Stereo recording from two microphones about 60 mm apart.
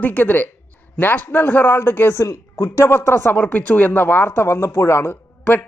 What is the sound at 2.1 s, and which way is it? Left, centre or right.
Speech, left.